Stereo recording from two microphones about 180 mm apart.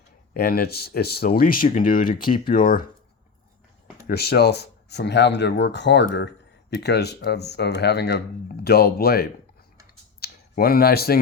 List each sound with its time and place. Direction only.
0.3 s speech: 60° left (ahead or behind)
4.0 s speech: 65° left (ahead or behind)